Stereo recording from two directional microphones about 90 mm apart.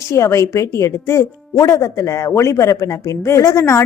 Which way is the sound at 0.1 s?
35° left (ahead or behind).